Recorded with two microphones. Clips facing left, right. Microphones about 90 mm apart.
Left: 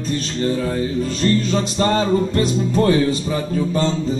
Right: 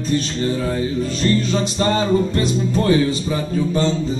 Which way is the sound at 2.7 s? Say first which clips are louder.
Even; 45° left (ahead or behind).